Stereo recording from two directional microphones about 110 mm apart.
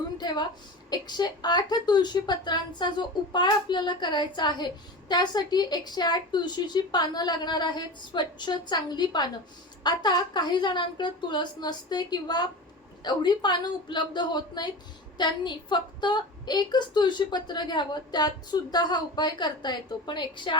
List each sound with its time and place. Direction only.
0.2 s a woman's voice: 40° left (ahead or behind)